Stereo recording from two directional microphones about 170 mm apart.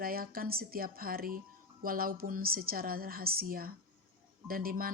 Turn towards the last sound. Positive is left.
turn(degrees=-60)  # may be behind; listen again after turning